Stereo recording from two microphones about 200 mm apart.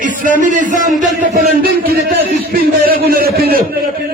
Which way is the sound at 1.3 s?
50° right (ahead or behind).